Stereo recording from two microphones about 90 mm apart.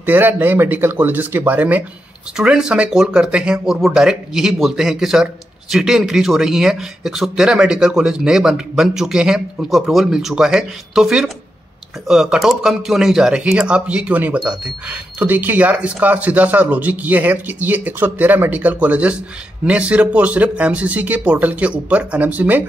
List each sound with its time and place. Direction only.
0.0 s speech: 20° right (ahead or behind)
2.3 s speech: 10° right (ahead or behind)